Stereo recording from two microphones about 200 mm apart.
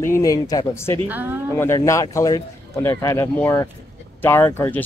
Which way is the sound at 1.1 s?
10° right (ahead or behind).